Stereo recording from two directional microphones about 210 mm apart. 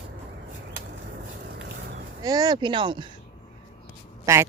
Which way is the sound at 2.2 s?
20° right (ahead or behind).